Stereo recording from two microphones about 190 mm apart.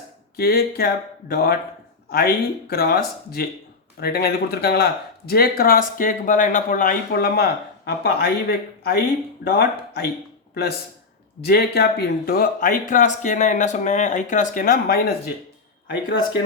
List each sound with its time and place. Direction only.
0.3 s a man's voice: 55° left (ahead or behind)